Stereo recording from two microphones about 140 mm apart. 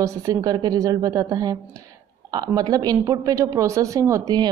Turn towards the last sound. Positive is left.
turn(degrees=-25)  # may be behind; listen again after turning